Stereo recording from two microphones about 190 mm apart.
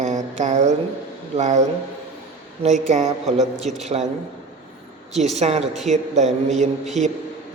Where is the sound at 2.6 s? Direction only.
40° right (ahead or behind).